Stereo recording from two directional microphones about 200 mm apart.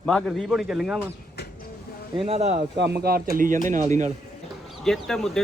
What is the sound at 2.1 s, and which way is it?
Speech, 30° right (ahead or behind).